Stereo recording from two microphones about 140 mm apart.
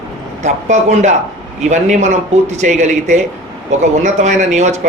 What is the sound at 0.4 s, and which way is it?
A man's voice, 55° right (ahead or behind).